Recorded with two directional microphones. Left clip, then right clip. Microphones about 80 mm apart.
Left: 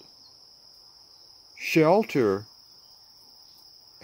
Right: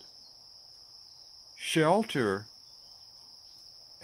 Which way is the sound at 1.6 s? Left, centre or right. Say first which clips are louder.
Left 5 dB; centre.